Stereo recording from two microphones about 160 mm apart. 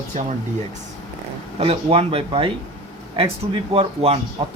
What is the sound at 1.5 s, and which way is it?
Speech, 40° right (ahead or behind).